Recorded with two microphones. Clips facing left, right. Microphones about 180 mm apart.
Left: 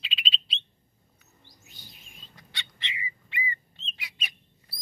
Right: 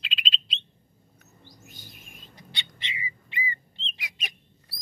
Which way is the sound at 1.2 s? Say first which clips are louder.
Right 7 dB; 50° right (ahead or behind).